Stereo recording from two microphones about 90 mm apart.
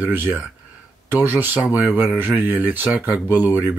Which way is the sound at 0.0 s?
20° right (ahead or behind).